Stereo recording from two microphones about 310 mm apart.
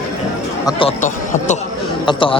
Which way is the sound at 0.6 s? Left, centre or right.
Centre.